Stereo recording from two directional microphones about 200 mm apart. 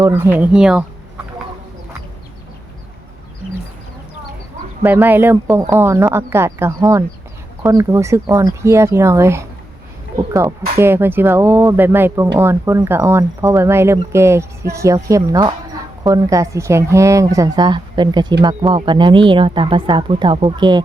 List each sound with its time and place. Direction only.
0.0 s speech: 10° right (ahead or behind)
4.8 s speech: 10° right (ahead or behind)